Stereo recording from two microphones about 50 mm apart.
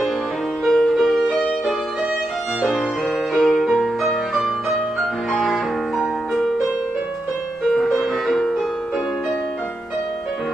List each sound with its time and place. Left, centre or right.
0.7 s music: centre
3.3 s music: centre
7.7 s music: centre